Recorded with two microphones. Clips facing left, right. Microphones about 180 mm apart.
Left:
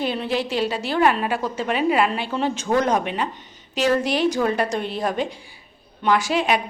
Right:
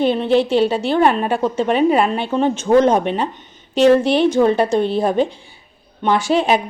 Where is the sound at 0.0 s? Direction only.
25° right (ahead or behind).